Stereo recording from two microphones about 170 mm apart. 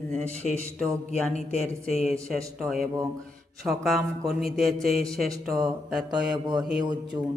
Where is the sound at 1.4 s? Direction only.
40° left (ahead or behind).